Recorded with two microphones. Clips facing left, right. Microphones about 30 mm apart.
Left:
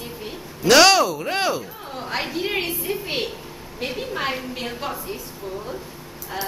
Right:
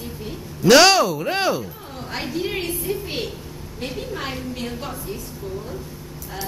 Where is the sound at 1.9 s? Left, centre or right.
Centre.